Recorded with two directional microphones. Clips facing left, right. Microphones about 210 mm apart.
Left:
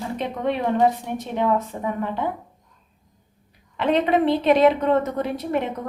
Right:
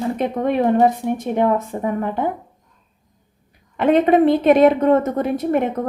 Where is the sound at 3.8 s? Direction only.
50° right (ahead or behind).